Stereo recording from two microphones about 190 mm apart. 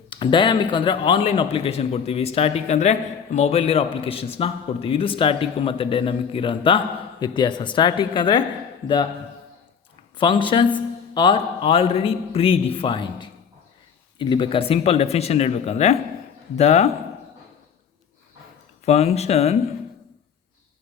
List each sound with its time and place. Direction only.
0.1 s a man's voice: 25° left (ahead or behind)
10.2 s a man's voice: 25° left (ahead or behind)
18.9 s speech: 35° left (ahead or behind)